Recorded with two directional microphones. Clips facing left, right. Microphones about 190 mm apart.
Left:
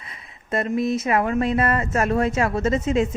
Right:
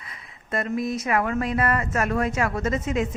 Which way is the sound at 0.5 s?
25° left (ahead or behind).